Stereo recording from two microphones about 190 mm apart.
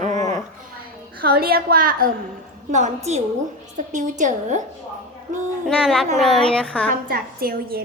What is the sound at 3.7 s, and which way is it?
Speech, 40° right (ahead or behind).